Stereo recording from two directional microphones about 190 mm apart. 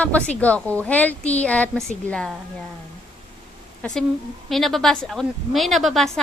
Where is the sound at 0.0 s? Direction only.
5° left (ahead or behind).